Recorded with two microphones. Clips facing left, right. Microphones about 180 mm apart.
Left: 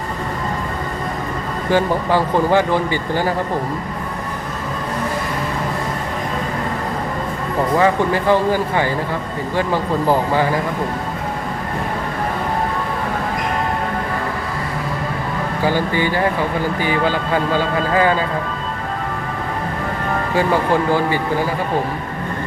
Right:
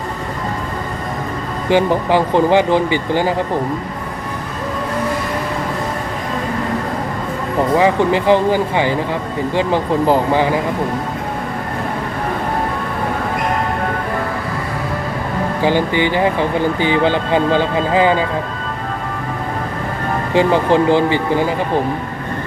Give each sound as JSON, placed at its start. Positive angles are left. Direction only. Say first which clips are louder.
{"t": 1.7, "sound": "speech", "louder": "right 3 dB", "side_deg": -15}
{"t": 7.8, "sound": "speech", "louder": "right 2 dB", "side_deg": -15}
{"t": 15.6, "sound": "speech", "louder": "right 3 dB", "side_deg": -20}
{"t": 20.3, "sound": "speech", "louder": "right 4 dB", "side_deg": -20}